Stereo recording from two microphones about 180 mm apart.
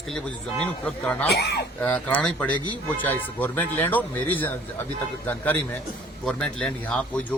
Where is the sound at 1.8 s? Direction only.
10° left (ahead or behind).